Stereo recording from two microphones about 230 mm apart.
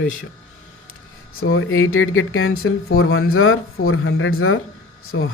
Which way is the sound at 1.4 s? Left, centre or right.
Left.